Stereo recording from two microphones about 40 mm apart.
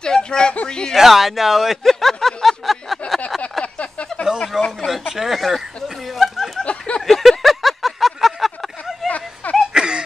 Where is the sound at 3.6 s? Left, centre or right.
Left.